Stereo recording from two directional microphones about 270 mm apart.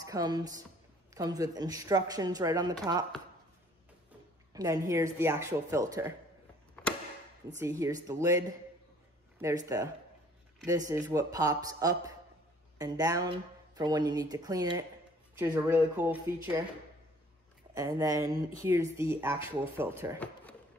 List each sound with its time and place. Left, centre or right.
0.0 s a woman's voice: centre
4.6 s speech: centre
7.5 s speech: centre
17.7 s speech: centre